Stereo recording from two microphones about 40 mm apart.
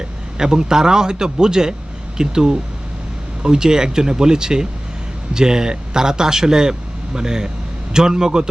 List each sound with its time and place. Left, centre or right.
0.3 s a man's voice: centre